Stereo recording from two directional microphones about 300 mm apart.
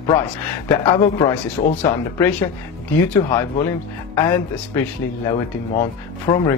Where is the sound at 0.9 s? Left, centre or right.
Centre.